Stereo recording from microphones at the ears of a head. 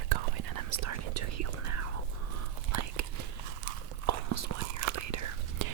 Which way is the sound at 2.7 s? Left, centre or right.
Right.